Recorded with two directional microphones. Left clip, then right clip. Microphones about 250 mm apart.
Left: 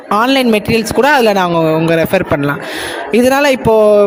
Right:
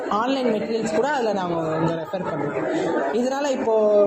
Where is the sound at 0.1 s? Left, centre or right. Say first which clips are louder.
Left 12 dB; left.